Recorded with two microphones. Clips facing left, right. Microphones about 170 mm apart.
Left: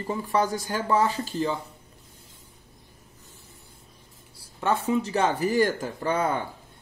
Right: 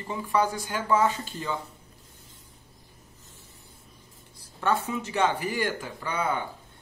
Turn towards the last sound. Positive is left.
turn(degrees=40)  # may be behind; listen again after turning